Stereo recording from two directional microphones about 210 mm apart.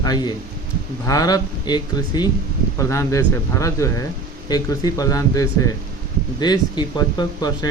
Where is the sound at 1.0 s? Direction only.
15° left (ahead or behind).